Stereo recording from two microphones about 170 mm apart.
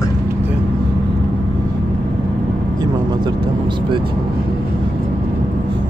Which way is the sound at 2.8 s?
25° right (ahead or behind).